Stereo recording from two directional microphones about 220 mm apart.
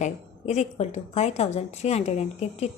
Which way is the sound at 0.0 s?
30° left (ahead or behind).